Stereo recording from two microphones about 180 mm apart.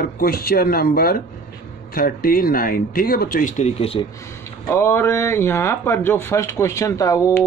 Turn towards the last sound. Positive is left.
turn(degrees=15)  # may be behind; listen again after turning